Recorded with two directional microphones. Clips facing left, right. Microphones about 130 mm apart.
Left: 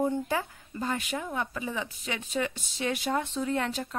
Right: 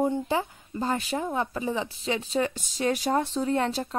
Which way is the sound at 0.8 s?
35° right (ahead or behind).